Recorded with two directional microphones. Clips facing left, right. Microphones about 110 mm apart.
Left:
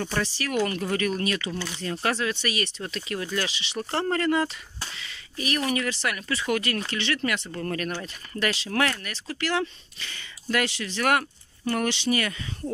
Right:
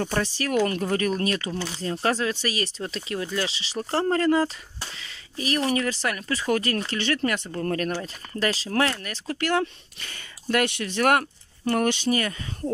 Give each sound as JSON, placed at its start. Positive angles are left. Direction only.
{"t": 0.0, "sound": "speech", "side_deg": -40}
{"t": 1.5, "sound": "speech", "side_deg": -30}
{"t": 9.3, "sound": "speech", "side_deg": -50}
{"t": 11.0, "sound": "speech", "side_deg": -45}